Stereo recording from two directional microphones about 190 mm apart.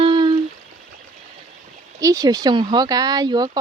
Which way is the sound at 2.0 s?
15° right (ahead or behind).